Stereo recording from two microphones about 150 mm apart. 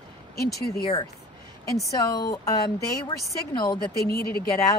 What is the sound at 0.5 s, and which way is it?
Speech, 90° left.